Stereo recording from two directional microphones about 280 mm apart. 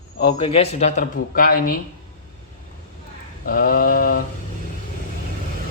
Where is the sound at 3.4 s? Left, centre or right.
Left.